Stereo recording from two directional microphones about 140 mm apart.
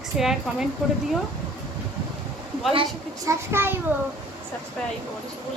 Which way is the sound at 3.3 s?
15° right (ahead or behind).